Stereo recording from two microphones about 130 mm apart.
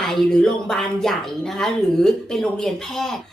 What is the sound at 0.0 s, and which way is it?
A woman's voice, 5° left (ahead or behind).